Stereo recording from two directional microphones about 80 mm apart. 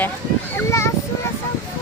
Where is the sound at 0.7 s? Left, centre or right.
Left.